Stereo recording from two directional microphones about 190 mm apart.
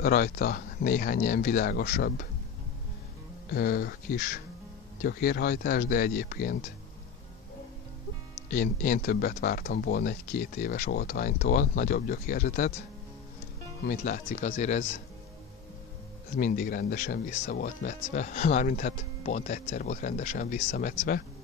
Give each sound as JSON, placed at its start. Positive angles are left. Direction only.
{"t": 0.0, "sound": "speech", "side_deg": 50}
{"t": 3.5, "sound": "speech", "side_deg": 55}
{"t": 8.5, "sound": "speech", "side_deg": 45}
{"t": 13.8, "sound": "speech", "side_deg": 45}
{"t": 16.3, "sound": "speech", "side_deg": 45}